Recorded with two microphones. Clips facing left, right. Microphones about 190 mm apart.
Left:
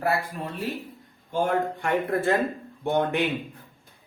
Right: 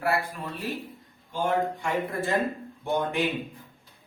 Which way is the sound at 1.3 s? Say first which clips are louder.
Left 2 dB; 55° left (ahead or behind).